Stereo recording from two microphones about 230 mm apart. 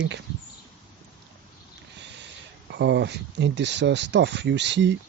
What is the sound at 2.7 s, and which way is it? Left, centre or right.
Speech, right.